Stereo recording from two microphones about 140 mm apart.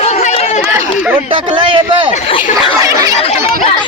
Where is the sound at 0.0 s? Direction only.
50° left (ahead or behind).